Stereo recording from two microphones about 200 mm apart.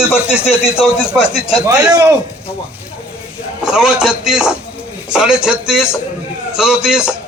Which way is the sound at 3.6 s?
5° right (ahead or behind).